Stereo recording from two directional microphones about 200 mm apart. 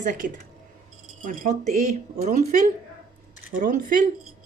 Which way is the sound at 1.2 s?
40° right (ahead or behind).